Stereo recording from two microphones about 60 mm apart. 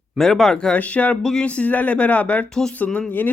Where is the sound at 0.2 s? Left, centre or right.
Centre.